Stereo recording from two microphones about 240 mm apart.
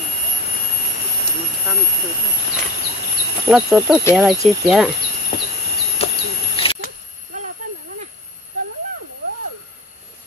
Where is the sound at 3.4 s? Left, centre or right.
Centre.